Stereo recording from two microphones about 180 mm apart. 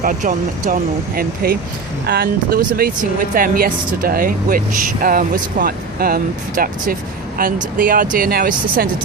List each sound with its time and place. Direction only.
0.0 s speech: 45° right (ahead or behind)